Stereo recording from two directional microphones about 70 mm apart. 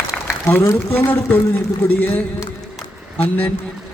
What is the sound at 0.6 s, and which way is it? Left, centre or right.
Speech, left.